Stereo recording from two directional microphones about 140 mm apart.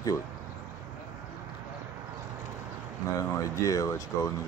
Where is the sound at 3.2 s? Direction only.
25° left (ahead or behind).